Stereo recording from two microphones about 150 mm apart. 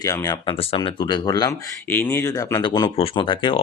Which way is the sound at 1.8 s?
15° left (ahead or behind).